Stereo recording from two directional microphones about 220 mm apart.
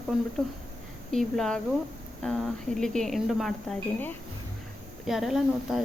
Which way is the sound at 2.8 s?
Centre (ahead or behind).